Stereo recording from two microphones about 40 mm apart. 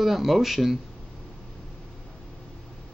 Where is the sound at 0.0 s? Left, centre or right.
Centre.